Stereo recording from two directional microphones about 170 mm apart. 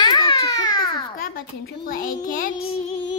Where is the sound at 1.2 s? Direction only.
60° left (ahead or behind).